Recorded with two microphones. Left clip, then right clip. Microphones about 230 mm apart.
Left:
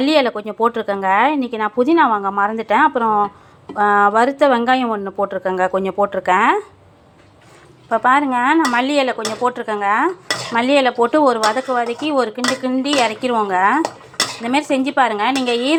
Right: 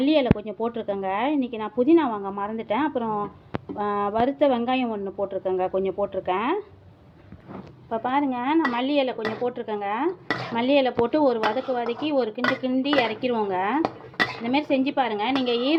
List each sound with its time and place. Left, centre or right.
0.0 s speech: centre
7.9 s speech: centre